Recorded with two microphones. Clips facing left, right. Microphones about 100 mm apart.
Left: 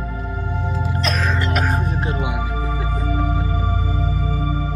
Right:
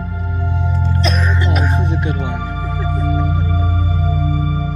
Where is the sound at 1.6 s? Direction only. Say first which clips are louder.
Right 2 dB; 45° left (ahead or behind).